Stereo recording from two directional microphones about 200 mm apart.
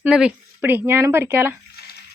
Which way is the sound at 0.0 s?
5° right (ahead or behind).